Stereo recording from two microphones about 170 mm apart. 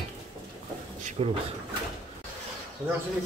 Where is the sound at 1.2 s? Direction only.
40° right (ahead or behind).